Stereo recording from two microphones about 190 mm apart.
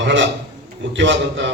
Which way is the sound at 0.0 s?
70° right (ahead or behind).